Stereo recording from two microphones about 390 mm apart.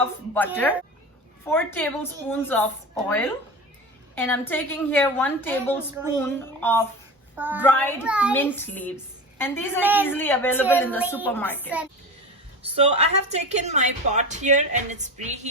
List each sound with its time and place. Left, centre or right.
0.3 s a woman's voice: centre
12.7 s a woman's voice: centre